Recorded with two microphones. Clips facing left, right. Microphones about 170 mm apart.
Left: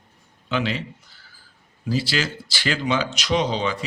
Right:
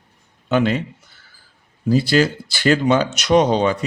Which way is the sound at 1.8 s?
50° right (ahead or behind).